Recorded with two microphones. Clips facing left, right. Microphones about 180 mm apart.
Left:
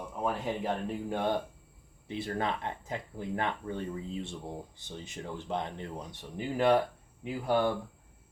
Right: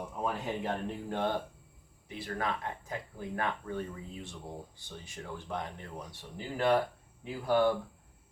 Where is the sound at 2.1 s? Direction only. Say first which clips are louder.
Left 3 dB; 25° left (ahead or behind).